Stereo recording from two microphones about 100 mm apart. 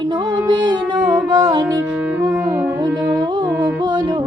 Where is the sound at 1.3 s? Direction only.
40° right (ahead or behind).